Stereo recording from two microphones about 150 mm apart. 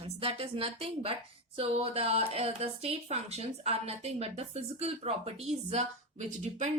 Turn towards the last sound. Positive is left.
turn(degrees=-50)  # may be behind; listen again after turning